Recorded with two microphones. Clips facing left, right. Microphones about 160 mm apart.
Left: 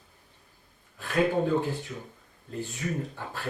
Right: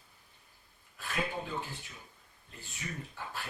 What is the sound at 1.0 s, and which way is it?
Speech, 40° left (ahead or behind).